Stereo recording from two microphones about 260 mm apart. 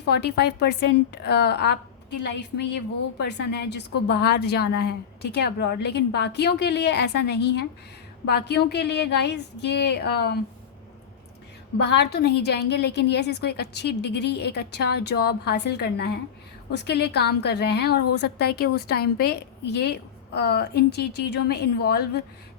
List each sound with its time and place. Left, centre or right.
0.0 s a woman's voice: left
11.8 s a woman's voice: left